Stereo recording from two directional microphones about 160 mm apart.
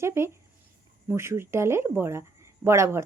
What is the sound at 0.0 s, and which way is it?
Speech, 15° right (ahead or behind).